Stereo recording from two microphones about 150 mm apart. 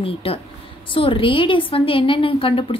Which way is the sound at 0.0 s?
40° left (ahead or behind).